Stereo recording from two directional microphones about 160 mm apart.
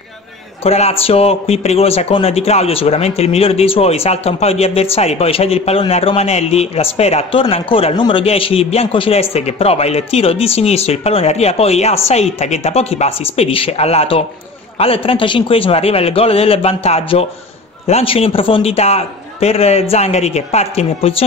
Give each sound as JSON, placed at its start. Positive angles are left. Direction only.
{"t": 0.7, "sound": "speech", "side_deg": 40}